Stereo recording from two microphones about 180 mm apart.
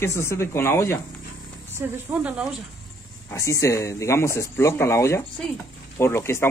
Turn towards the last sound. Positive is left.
turn(degrees=15)  # may be behind; listen again after turning